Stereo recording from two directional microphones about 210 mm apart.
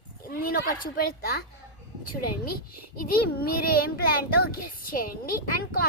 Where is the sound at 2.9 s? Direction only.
45° left (ahead or behind).